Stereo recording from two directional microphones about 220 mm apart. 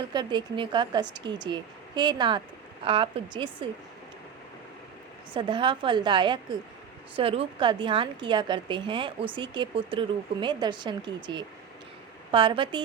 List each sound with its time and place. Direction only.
0.1 s speech: 20° right (ahead or behind)
5.3 s speech: 20° right (ahead or behind)